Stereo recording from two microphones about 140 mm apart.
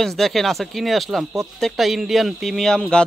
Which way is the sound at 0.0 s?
Centre (ahead or behind).